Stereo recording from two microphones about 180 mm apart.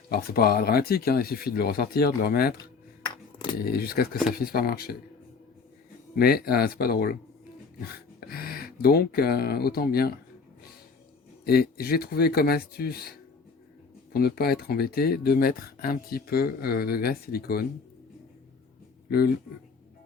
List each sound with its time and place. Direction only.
0.1 s speech: 55° left (ahead or behind)
3.6 s speech: 60° left (ahead or behind)
6.1 s speech: 60° left (ahead or behind)
8.3 s speech: 55° left (ahead or behind)
11.4 s speech: 60° left (ahead or behind)